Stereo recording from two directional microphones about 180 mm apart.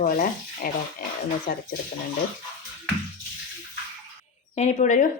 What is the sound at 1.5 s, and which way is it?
Speech, 65° left (ahead or behind).